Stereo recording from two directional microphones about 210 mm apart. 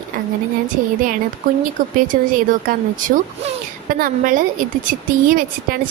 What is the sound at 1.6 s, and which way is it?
A woman's voice, 40° right (ahead or behind).